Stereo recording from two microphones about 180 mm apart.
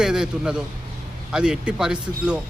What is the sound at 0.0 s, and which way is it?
Speech, 5° right (ahead or behind).